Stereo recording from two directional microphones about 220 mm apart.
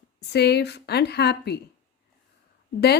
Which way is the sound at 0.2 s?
50° left (ahead or behind).